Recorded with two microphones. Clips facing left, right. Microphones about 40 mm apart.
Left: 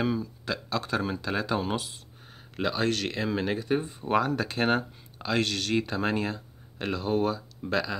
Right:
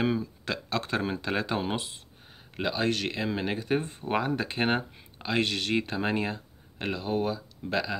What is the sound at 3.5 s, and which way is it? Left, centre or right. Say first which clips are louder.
Speech: left 1 dB; right.